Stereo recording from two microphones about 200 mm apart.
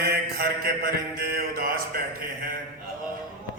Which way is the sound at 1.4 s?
45° right (ahead or behind).